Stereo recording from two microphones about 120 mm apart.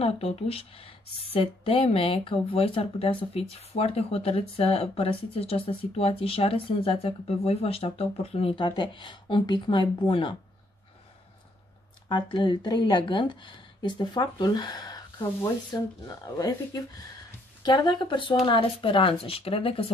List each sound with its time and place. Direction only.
0.0 s speech: 55° left (ahead or behind)
12.1 s a woman's voice: 40° left (ahead or behind)